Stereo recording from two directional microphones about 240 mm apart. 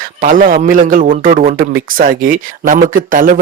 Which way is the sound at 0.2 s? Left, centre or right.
Right.